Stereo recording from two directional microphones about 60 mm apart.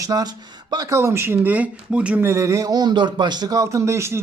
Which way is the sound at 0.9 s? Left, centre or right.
Right.